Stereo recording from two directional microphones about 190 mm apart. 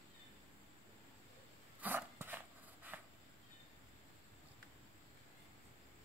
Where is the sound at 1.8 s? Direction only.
10° right (ahead or behind).